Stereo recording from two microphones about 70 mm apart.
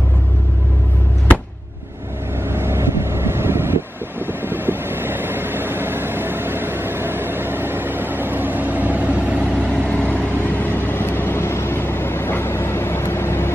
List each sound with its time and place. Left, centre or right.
2.5 s vehicle: right
9.8 s vehicle: left